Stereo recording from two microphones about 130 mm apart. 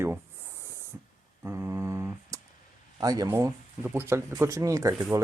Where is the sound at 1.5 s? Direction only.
20° right (ahead or behind).